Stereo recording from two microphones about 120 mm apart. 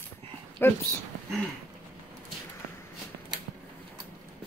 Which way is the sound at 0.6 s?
20° left (ahead or behind).